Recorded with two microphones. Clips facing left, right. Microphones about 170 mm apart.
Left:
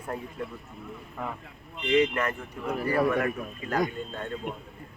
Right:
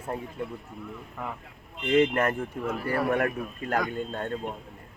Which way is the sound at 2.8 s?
15° left (ahead or behind).